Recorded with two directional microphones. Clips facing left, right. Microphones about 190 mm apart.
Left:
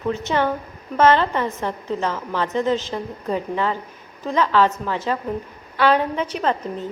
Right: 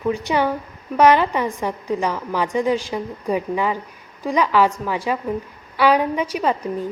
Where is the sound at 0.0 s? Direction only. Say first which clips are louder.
Right 1 dB; 10° right (ahead or behind).